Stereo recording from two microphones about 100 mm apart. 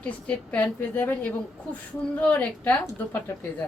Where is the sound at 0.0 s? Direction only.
15° left (ahead or behind).